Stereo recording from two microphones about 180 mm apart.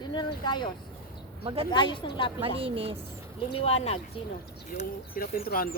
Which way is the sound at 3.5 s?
35° left (ahead or behind).